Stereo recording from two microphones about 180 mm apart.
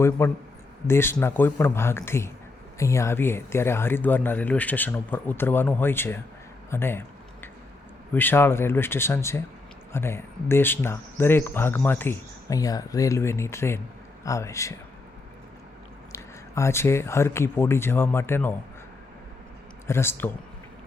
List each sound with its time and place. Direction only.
0.2 s speech: 15° left (ahead or behind)
8.1 s speech: 10° left (ahead or behind)
16.1 s speech: 15° left (ahead or behind)
19.9 s speech: 15° left (ahead or behind)